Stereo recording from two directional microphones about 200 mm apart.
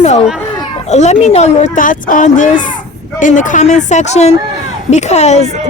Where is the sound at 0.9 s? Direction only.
35° left (ahead or behind).